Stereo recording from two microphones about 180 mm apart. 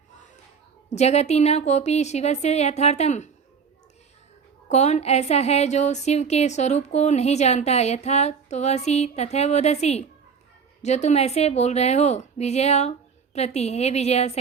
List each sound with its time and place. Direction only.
0.9 s a woman's voice: 40° left (ahead or behind)
4.7 s a woman's voice: 40° left (ahead or behind)